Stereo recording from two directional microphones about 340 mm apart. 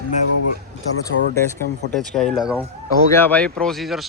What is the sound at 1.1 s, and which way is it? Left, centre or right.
Speech, left.